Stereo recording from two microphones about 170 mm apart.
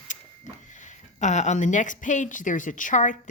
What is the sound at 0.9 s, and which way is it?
A woman's voice, 45° left (ahead or behind).